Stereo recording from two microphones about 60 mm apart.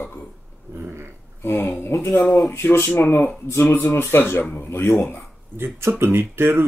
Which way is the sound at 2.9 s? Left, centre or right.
Left.